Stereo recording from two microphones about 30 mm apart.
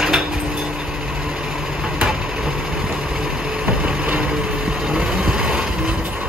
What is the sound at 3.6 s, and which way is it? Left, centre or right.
Vehicle, right.